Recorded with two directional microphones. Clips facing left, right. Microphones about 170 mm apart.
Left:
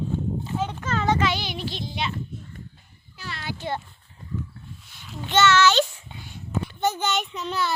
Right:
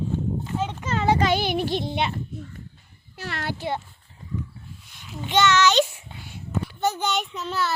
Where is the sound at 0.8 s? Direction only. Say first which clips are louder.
Right 1 dB; 20° right (ahead or behind).